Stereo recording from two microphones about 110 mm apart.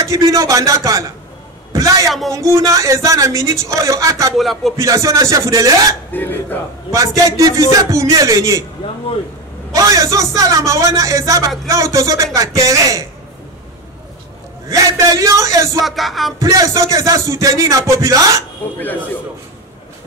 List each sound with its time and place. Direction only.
0.3 s speech: 30° right (ahead or behind)
2.0 s music: centre (ahead or behind)
2.3 s speech: 25° right (ahead or behind)
4.4 s music: centre (ahead or behind)
4.7 s speech: 30° right (ahead or behind)
6.1 s speech: 20° left (ahead or behind)
6.9 s speech: 30° right (ahead or behind)
9.8 s speech: 30° right (ahead or behind)
14.7 s speech: 30° right (ahead or behind)
15.8 s music: centre (ahead or behind)
16.3 s speech: 30° right (ahead or behind)
18.8 s a man's voice: 15° left (ahead or behind)